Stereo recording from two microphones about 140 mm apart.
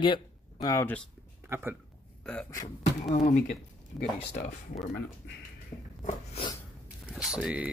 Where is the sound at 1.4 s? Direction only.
15° right (ahead or behind).